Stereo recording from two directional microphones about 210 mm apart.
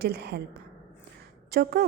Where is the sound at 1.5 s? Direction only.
45° right (ahead or behind).